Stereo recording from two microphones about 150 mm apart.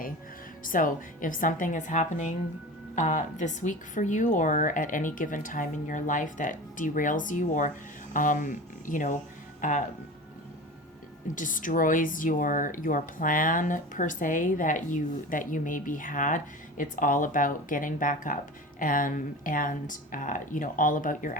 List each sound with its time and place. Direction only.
0.6 s speech: 65° left (ahead or behind)
11.3 s speech: 60° left (ahead or behind)